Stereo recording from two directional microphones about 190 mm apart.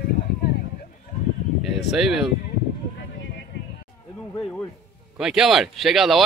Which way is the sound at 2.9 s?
65° left (ahead or behind).